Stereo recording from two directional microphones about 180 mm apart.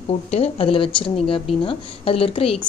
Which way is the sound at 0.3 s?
35° left (ahead or behind).